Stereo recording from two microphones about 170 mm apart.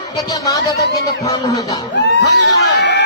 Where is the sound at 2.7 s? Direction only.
80° left.